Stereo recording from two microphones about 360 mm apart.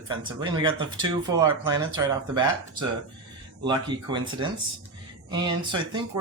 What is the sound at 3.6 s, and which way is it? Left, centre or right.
Speech, centre.